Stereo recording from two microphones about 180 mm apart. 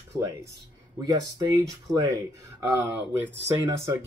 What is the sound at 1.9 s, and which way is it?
Speech, 20° right (ahead or behind).